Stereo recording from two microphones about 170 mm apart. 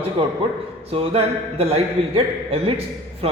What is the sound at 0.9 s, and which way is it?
A man's voice, 35° right (ahead or behind).